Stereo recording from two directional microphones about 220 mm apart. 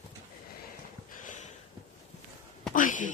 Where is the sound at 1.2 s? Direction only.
35° left (ahead or behind).